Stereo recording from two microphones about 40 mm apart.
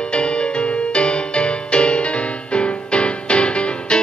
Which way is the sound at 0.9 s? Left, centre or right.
Left.